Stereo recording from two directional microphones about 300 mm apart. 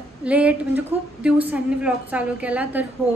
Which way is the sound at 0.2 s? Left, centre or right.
Centre.